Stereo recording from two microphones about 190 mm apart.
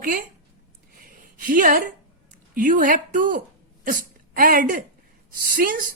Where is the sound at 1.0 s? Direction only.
45° right (ahead or behind).